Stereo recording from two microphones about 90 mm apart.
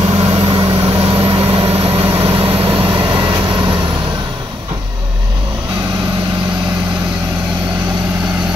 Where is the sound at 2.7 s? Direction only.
55° right (ahead or behind).